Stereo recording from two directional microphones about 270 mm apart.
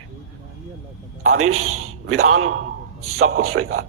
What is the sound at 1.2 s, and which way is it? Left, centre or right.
A man's voice, right.